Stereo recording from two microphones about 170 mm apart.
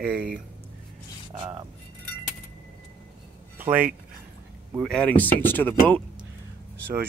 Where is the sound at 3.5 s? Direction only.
10° right (ahead or behind).